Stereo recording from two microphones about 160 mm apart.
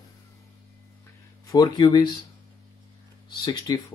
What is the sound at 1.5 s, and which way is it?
Speech, 25° left (ahead or behind).